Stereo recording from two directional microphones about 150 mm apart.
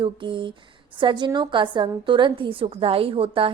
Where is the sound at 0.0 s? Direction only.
35° right (ahead or behind).